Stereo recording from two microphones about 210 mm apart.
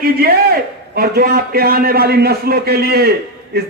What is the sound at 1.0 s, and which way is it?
A man's voice, 45° right (ahead or behind).